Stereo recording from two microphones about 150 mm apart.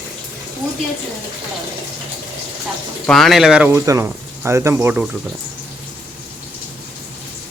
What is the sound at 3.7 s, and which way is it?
Speech, 20° right (ahead or behind).